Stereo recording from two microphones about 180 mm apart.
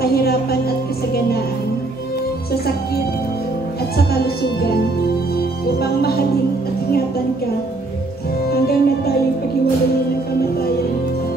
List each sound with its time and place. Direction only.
0.0 s music: 60° left (ahead or behind)
3.9 s speech: 60° left (ahead or behind)
5.3 s music: 60° left (ahead or behind)
8.5 s music: 60° left (ahead or behind)